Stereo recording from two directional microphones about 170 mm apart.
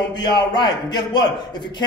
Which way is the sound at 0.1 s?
25° left (ahead or behind).